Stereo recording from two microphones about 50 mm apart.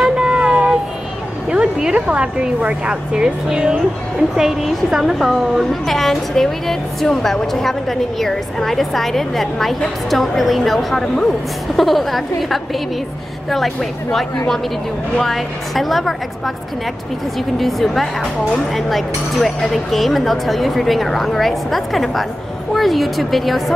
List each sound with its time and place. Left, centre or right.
0.0 s a sound: centre
1.5 s a woman's voice: centre
17.6 s a woman's voice: centre